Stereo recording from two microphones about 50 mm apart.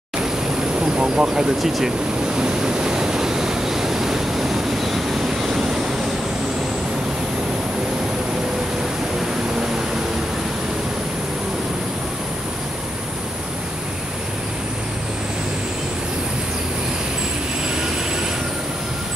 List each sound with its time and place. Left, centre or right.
0.7 s vehicle: centre
1.6 s speech: centre
2.3 s waves: centre